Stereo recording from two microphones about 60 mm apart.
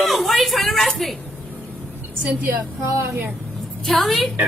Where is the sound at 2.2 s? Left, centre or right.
Right.